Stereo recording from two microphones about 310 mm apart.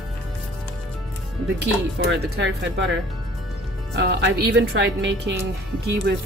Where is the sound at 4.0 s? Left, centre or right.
Right.